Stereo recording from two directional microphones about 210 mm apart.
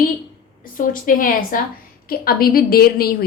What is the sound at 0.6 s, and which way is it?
A woman's voice, 40° left (ahead or behind).